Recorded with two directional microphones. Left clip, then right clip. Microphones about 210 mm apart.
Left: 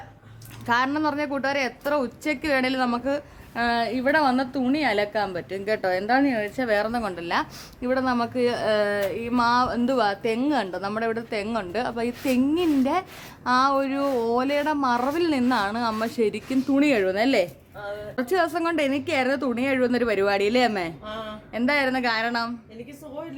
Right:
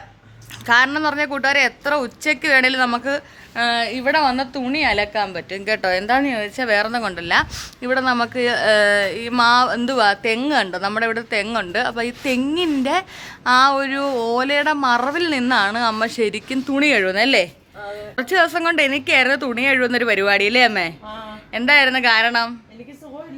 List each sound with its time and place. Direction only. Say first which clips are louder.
0.7 s a woman's voice: right 7 dB; 5° left (ahead or behind)